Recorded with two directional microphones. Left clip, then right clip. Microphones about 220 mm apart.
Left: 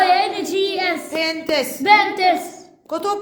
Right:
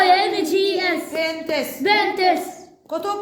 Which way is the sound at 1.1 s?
25° left (ahead or behind).